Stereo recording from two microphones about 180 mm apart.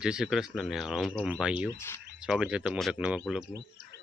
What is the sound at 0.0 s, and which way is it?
Speech, 5° right (ahead or behind).